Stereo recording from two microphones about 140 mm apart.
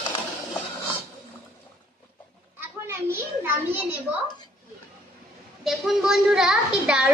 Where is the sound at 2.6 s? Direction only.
15° right (ahead or behind).